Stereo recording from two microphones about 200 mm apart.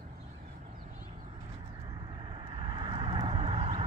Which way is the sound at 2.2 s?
25° right (ahead or behind).